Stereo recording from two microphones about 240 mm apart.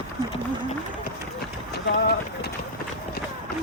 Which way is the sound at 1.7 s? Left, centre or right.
Left.